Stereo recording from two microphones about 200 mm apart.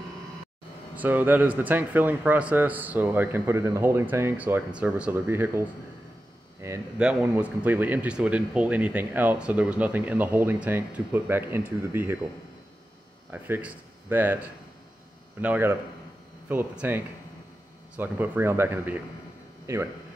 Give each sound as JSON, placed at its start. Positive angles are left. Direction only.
{"t": 0.9, "sound": "speech", "side_deg": -10}
{"t": 13.3, "sound": "speech", "side_deg": -10}
{"t": 15.4, "sound": "a man's voice", "side_deg": -10}